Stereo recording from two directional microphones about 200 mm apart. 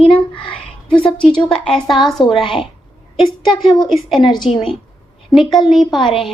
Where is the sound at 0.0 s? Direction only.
25° left (ahead or behind).